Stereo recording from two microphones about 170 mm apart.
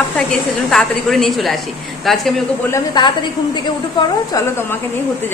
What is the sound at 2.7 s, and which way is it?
A woman's voice, 25° left (ahead or behind).